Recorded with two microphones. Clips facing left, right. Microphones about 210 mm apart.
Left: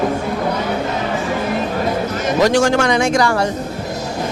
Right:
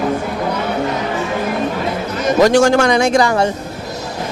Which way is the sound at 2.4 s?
50° right (ahead or behind).